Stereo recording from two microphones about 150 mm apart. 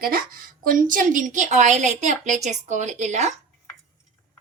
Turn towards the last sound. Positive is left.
turn(degrees=-50)  # may be behind; listen again after turning